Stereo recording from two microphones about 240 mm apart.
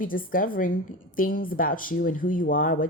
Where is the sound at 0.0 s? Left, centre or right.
Left.